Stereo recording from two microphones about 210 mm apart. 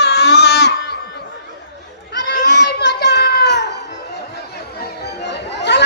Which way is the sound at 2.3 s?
55° left (ahead or behind).